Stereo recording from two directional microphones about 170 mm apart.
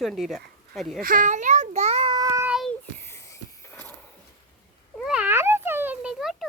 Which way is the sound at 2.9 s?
15° left (ahead or behind).